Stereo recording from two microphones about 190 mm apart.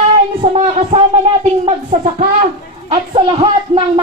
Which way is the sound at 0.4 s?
35° right (ahead or behind).